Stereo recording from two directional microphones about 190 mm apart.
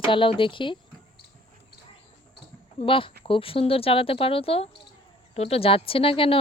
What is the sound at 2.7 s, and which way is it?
Speech, 30° left (ahead or behind).